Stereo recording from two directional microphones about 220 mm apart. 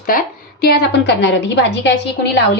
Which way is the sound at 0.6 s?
45° left (ahead or behind).